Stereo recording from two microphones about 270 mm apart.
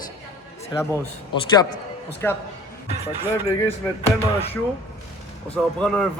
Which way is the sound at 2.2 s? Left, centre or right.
Centre.